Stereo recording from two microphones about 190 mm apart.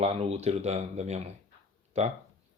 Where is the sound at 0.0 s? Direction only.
30° right (ahead or behind).